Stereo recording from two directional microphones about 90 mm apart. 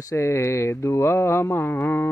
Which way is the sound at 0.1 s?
30° left (ahead or behind).